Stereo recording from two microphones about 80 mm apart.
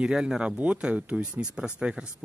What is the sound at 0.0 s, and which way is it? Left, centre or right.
Speech, centre.